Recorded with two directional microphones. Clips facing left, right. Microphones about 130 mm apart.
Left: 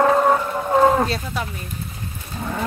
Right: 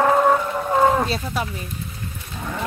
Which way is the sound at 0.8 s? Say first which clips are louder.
Left 2 dB; centre (ahead or behind).